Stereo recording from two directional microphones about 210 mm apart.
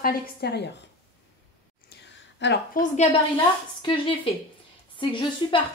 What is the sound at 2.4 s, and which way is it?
Speech, 55° left (ahead or behind).